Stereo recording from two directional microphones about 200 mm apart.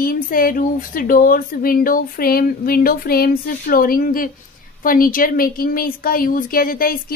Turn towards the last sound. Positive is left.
turn(degrees=45)  # may be behind; listen again after turning